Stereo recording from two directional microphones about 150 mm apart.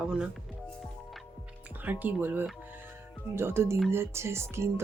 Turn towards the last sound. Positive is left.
turn(degrees=-15)  # may be behind; listen again after turning